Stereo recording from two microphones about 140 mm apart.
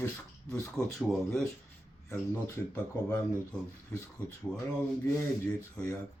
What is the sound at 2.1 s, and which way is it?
Speech, 20° left (ahead or behind).